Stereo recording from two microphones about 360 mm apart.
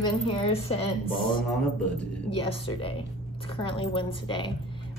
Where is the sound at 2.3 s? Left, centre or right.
Centre.